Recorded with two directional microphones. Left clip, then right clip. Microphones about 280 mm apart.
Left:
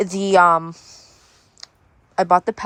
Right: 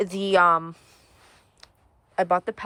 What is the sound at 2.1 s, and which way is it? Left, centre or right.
Speech, centre.